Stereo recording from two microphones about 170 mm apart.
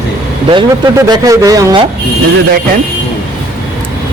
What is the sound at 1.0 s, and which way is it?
Speech, 20° right (ahead or behind).